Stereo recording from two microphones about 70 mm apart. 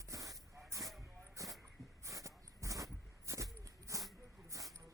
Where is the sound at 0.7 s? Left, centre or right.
Right.